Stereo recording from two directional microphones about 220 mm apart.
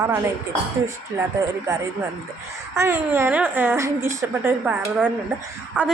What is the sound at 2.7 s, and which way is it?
A woman's voice, 10° right (ahead or behind).